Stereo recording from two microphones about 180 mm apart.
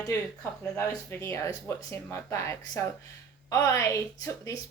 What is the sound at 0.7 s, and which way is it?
A woman's voice, 15° left (ahead or behind).